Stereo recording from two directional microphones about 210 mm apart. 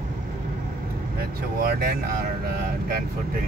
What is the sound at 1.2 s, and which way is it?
Speech, 45° right (ahead or behind).